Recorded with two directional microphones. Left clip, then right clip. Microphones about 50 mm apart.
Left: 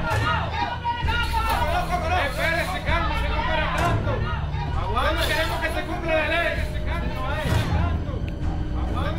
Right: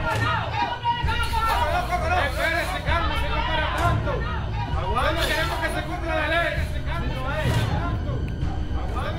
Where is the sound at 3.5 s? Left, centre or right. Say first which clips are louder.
Left 1 dB; right.